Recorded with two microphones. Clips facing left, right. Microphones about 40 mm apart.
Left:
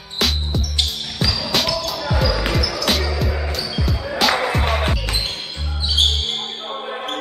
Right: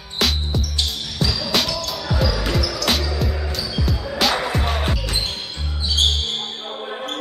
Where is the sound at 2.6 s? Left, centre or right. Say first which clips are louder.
Left 1 dB; centre.